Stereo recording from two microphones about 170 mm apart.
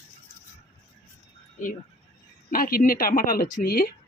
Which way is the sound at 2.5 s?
60° left (ahead or behind).